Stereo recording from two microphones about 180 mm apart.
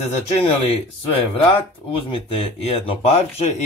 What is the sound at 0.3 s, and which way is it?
Speech, 35° left (ahead or behind).